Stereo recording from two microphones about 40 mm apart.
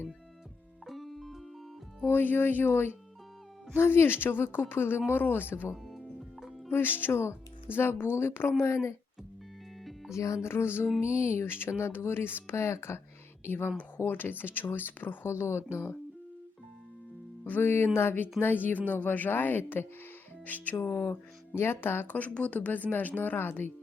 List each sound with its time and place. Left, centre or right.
0.9 s music: centre
2.0 s speech: left
2.6 s speech: left
5.7 s music: centre
6.7 s speech: left
10.4 s a woman's voice: left
11.3 s a woman's voice: left
14.1 s speech: left
15.3 s a woman's voice: left
17.6 s a woman's voice: left
18.3 s speech: left
20.4 s speech: left
20.7 s speech: left
22.0 s speech: left